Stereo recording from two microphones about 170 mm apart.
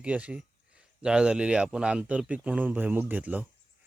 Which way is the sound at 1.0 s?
5° right (ahead or behind).